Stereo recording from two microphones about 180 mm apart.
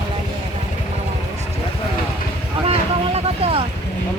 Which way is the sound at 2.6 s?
35° right (ahead or behind).